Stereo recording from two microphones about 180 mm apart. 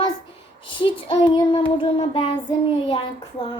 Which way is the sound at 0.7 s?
30° left (ahead or behind).